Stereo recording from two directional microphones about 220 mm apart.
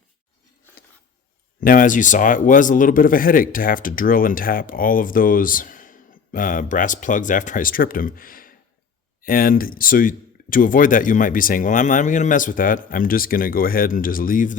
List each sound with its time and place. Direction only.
1.6 s speech: 40° left (ahead or behind)